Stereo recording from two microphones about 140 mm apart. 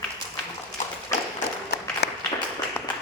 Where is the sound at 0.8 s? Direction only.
60° left (ahead or behind).